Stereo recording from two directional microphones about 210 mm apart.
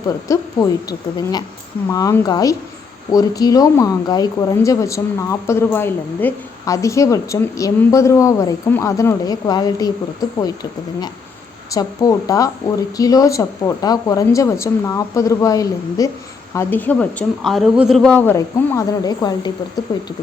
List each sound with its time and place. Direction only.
0.3 s speech: 15° left (ahead or behind)